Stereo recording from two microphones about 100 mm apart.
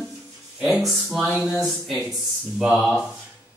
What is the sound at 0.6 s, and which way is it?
Speech, centre (ahead or behind).